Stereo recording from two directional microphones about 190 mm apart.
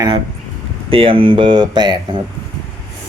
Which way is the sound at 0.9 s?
30° right (ahead or behind).